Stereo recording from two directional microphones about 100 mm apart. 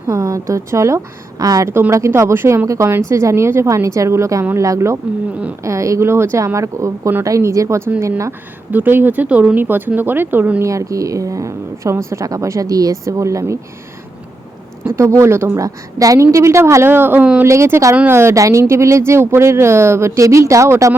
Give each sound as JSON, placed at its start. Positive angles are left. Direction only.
{"t": 0.1, "sound": "a woman's voice", "side_deg": -35}
{"t": 10.7, "sound": "a woman's voice", "side_deg": -35}
{"t": 14.8, "sound": "speech", "side_deg": -30}